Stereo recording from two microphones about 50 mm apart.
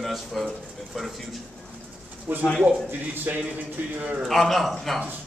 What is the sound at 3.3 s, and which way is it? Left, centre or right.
Speech, right.